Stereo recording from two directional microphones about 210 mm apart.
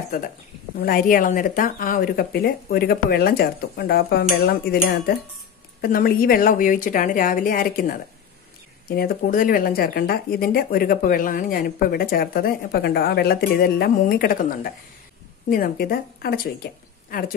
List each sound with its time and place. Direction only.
0.7 s speech: 45° left (ahead or behind)